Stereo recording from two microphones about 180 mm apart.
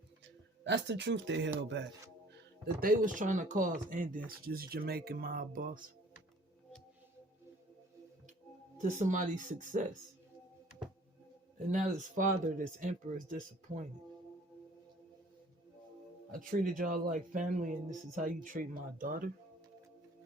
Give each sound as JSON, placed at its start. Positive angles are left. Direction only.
{"t": 0.6, "sound": "speech", "side_deg": -80}
{"t": 2.3, "sound": "speech", "side_deg": -55}
{"t": 8.8, "sound": "speech", "side_deg": -45}
{"t": 11.7, "sound": "speech", "side_deg": -45}
{"t": 16.3, "sound": "speech", "side_deg": -50}